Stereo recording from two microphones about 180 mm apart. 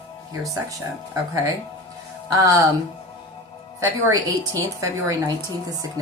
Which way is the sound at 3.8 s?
20° right (ahead or behind).